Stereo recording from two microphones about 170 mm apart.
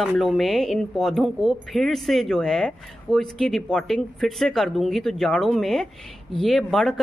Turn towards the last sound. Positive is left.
turn(degrees=0)  # may be behind; listen again after turning